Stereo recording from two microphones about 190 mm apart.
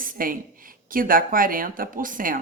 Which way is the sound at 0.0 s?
45° right (ahead or behind).